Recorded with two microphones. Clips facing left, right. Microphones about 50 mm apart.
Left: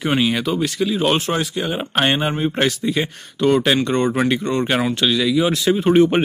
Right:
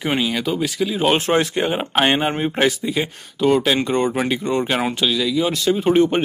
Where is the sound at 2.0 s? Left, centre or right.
Centre.